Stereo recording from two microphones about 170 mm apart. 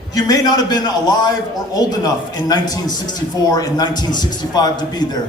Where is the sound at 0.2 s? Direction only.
20° left (ahead or behind).